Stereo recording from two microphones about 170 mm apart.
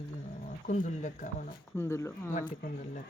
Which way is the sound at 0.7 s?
45° left (ahead or behind).